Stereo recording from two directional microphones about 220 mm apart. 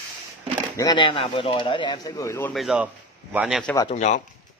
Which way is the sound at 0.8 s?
20° left (ahead or behind).